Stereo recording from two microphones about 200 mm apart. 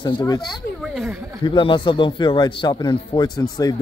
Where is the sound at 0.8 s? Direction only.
Centre (ahead or behind).